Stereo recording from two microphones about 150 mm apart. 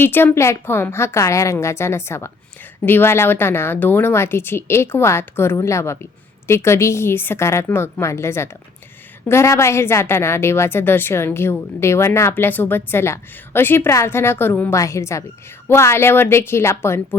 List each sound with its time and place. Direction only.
0.0 s a woman's voice: 15° left (ahead or behind)